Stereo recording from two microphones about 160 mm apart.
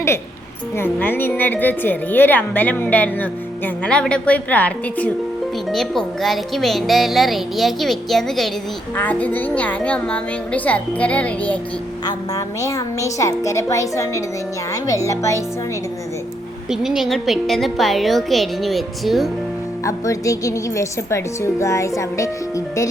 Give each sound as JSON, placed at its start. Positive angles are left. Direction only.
{"t": 0.8, "sound": "a woman's voice", "side_deg": 10}
{"t": 12.0, "sound": "a woman's voice", "side_deg": 20}
{"t": 16.6, "sound": "speech", "side_deg": 0}
{"t": 19.8, "sound": "a woman's voice", "side_deg": 20}